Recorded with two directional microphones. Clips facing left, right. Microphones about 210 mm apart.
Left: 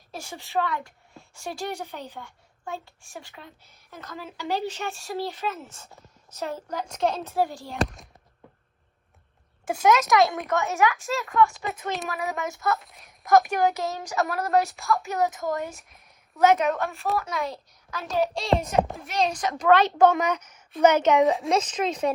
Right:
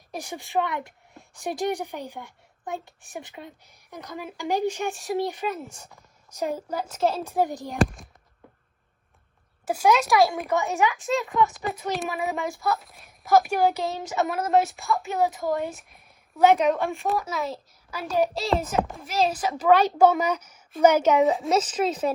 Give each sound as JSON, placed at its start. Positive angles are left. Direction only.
{"t": 0.1, "sound": "speech", "side_deg": -15}
{"t": 7.3, "sound": "speech", "side_deg": -20}
{"t": 9.6, "sound": "a child's voice", "side_deg": 0}
{"t": 10.5, "sound": "speech", "side_deg": -15}
{"t": 10.9, "sound": "a child's voice", "side_deg": 0}
{"t": 16.6, "sound": "speech", "side_deg": -15}
{"t": 16.9, "sound": "a child's voice", "side_deg": 0}